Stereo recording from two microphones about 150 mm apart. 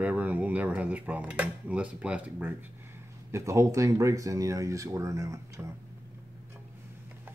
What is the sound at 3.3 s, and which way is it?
Speech, 20° right (ahead or behind).